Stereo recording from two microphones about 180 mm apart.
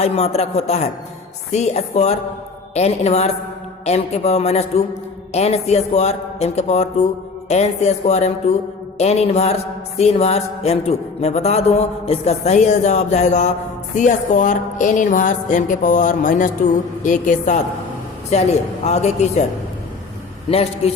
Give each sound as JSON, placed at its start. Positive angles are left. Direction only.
{"t": 0.0, "sound": "a man's voice", "side_deg": 35}
{"t": 20.5, "sound": "a man's voice", "side_deg": 35}